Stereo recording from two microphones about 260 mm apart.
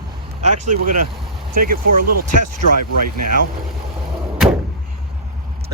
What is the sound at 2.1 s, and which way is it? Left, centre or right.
Speech, right.